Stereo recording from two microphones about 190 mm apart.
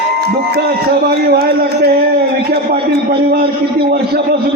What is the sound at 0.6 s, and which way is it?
A man's voice, 55° right (ahead or behind).